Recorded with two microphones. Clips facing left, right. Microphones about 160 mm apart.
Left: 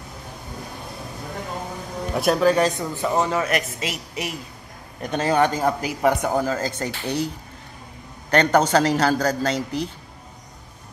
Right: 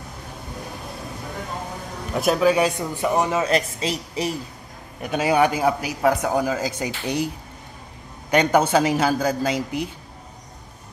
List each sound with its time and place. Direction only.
2.1 s a man's voice: centre (ahead or behind); by 4.4 s 30° right (ahead or behind)
5.0 s a man's voice: 10° right (ahead or behind)
8.3 s a man's voice: 10° right (ahead or behind)